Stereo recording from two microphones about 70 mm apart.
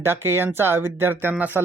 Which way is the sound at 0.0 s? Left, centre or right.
Right.